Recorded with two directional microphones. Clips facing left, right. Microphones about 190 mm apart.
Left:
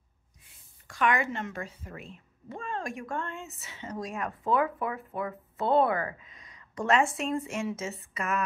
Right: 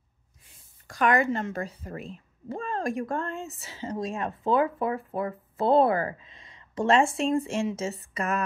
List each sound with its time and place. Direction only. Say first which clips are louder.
0.8 s speech: right 4 dB; 40° right (ahead or behind)